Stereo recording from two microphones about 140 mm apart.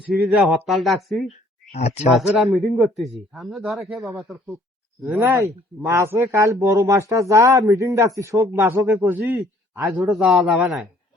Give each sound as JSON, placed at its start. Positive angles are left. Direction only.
{"t": 0.3, "sound": "a man's voice", "side_deg": 0}
{"t": 1.7, "sound": "speech", "side_deg": 50}
{"t": 2.1, "sound": "a man's voice", "side_deg": 0}
{"t": 5.2, "sound": "a man's voice", "side_deg": -20}
{"t": 9.8, "sound": "a man's voice", "side_deg": 0}